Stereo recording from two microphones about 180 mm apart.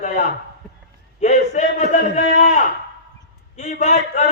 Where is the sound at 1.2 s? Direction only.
40° left (ahead or behind).